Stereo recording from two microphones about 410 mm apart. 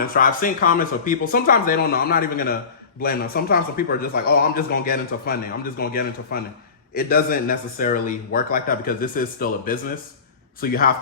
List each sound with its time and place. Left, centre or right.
0.0 s a man's voice: left